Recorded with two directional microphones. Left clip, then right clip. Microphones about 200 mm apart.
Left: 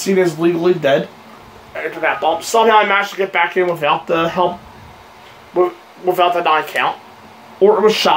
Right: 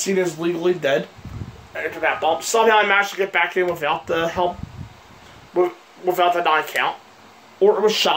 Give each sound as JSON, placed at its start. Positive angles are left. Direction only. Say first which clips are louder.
{"t": 0.0, "sound": "speech", "louder": "left 6 dB", "side_deg": -20}
{"t": 5.5, "sound": "speech", "louder": "left 4 dB", "side_deg": -20}